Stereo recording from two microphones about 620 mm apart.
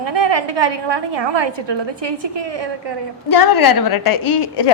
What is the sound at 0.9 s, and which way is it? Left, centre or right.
Speech, right.